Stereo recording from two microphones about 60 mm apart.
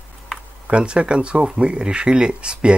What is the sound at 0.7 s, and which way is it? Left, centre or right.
Speech, centre.